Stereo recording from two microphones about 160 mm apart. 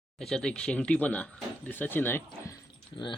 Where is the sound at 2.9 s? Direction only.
30° left (ahead or behind).